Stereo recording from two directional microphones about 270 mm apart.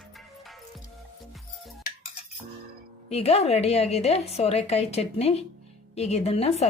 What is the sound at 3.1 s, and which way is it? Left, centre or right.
A woman's voice, left.